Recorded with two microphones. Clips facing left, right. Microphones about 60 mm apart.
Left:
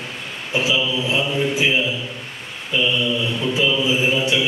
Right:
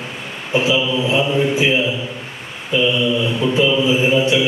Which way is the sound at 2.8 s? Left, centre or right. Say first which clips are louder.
Right 4 dB; centre.